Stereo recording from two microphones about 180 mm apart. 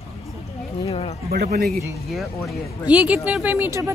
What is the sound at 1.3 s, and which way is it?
Speech, 60° right (ahead or behind).